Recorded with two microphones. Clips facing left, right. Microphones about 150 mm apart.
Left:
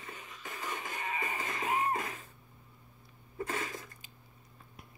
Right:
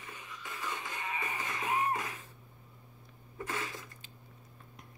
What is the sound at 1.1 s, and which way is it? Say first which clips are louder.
Music: left 1 dB; 35° left (ahead or behind).